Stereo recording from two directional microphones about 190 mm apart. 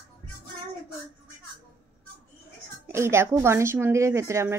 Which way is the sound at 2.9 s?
15° right (ahead or behind).